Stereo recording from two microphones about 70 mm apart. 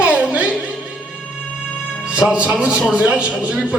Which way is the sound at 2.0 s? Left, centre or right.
Centre.